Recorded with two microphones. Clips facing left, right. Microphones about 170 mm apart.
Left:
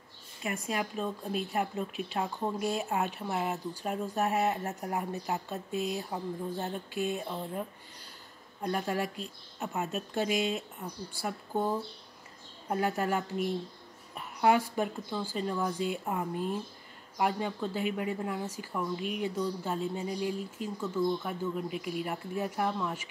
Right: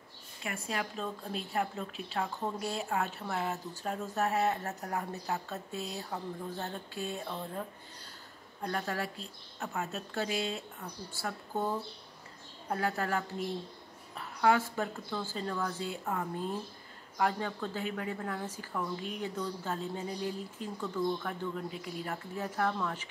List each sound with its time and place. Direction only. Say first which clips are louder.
0.4 s a woman's voice: left 3 dB; 20° left (ahead or behind)
8.6 s a woman's voice: left 3 dB; 15° left (ahead or behind)